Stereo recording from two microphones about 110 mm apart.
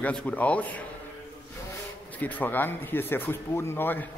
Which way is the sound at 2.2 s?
15° left (ahead or behind).